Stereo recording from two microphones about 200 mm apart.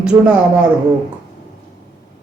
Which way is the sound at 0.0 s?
5° right (ahead or behind).